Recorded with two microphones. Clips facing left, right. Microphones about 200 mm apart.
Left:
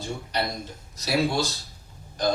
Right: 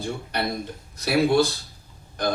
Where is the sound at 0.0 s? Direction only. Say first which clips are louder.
Right 2 dB; 55° right (ahead or behind).